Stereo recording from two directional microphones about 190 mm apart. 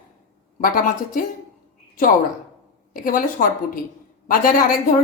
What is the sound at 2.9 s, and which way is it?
A woman's voice, 45° left (ahead or behind).